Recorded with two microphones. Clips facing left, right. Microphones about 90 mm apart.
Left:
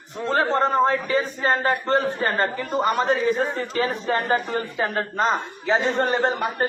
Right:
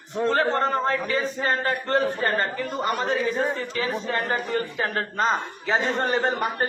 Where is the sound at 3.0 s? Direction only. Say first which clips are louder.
Left 3 dB; 40° left (ahead or behind).